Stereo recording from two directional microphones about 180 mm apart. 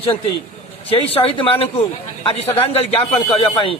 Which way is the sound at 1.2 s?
30° left (ahead or behind).